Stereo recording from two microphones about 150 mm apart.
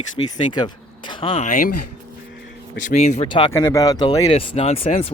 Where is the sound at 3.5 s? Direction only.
20° left (ahead or behind).